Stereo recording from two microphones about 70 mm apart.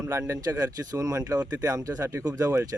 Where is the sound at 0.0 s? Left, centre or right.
Right.